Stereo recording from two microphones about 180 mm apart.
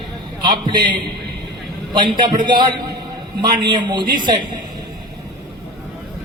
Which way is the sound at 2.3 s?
50° right (ahead or behind).